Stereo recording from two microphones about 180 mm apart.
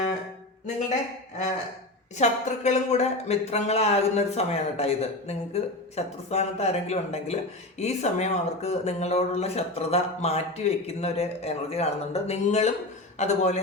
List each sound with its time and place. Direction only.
2.1 s speech: 40° left (ahead or behind)